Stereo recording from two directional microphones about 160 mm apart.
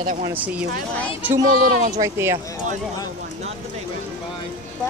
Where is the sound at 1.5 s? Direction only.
60° right (ahead or behind).